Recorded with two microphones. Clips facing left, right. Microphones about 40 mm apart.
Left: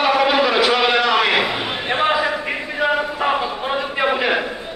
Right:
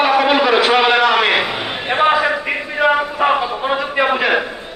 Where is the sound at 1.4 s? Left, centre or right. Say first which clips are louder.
Right 1 dB; centre.